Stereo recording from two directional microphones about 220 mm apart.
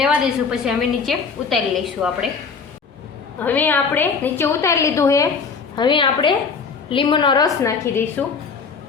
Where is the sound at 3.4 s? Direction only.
10° left (ahead or behind).